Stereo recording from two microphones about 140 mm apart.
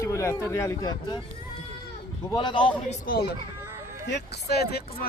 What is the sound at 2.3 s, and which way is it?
Speech, 35° left (ahead or behind).